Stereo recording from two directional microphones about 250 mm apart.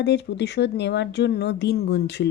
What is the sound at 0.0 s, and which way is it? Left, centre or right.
A woman's voice, left.